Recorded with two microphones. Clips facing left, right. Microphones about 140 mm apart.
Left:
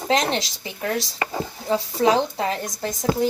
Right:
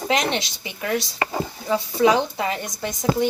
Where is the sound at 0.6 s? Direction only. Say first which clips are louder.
Right 1 dB; 35° left (ahead or behind).